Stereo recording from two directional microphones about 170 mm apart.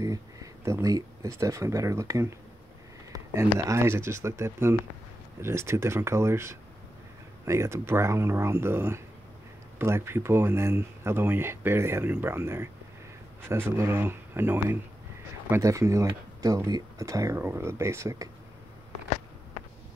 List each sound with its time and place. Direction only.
0.0 s speech: 20° right (ahead or behind)